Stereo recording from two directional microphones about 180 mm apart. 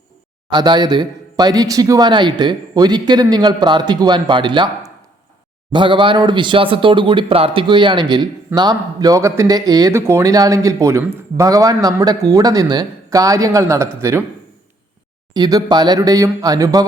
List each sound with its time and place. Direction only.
0.5 s speech: 25° right (ahead or behind)
5.7 s speech: 25° right (ahead or behind)
15.3 s speech: 20° right (ahead or behind)